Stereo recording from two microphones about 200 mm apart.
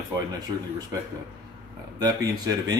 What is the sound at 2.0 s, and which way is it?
Speech, 20° right (ahead or behind).